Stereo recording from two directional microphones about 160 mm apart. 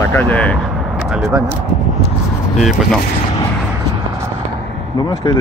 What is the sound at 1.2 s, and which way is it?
Speech, 15° right (ahead or behind).